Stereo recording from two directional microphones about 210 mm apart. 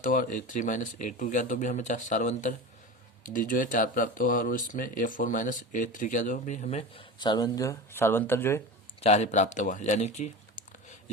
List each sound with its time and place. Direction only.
0.0 s speech: 40° left (ahead or behind); by 8.6 s 10° left (ahead or behind)
9.0 s speech: 30° left (ahead or behind)